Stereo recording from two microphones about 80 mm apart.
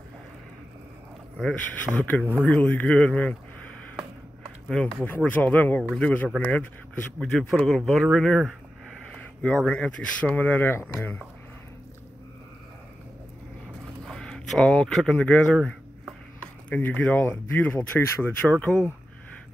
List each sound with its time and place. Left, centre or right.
1.5 s speech: centre
4.6 s speech: centre
5.0 s speech: left
7.2 s speech: centre
9.1 s a sound: centre
9.8 s speech: centre; by 11.1 s left
14.0 s speech: centre
16.6 s speech: left